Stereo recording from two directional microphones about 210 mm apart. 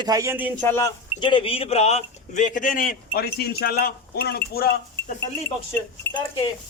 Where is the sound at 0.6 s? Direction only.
10° left (ahead or behind).